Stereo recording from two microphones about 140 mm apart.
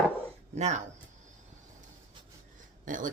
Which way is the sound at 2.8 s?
70° right (ahead or behind).